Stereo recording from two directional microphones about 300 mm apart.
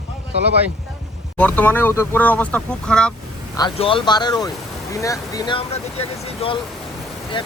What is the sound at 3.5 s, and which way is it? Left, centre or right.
Speech, centre.